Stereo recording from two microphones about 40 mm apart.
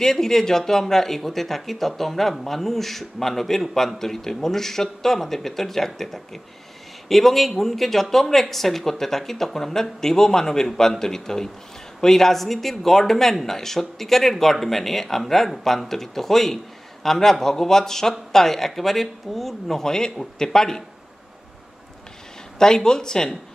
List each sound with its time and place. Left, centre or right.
0.0 s speech: centre
19.8 s speech: centre
22.6 s speech: centre